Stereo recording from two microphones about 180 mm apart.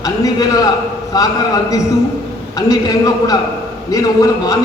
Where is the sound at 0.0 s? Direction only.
20° left (ahead or behind).